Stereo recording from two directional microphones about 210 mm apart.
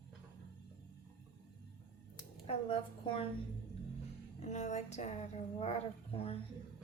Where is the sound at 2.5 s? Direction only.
25° left (ahead or behind).